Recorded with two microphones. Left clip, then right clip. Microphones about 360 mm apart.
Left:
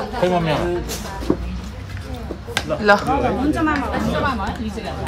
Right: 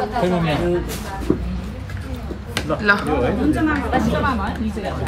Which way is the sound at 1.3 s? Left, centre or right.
Centre.